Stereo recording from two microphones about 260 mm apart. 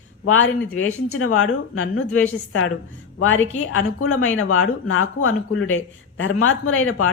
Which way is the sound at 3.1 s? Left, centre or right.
Left.